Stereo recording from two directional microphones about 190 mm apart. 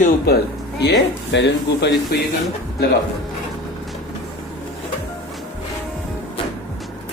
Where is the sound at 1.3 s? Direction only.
65° left (ahead or behind).